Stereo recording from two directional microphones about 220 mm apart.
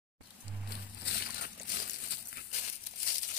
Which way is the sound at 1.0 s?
50° left (ahead or behind).